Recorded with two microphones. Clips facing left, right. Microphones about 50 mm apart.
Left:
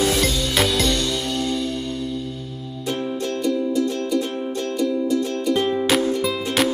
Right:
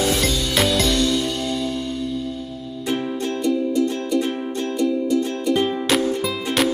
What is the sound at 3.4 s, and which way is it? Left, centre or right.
Music, centre.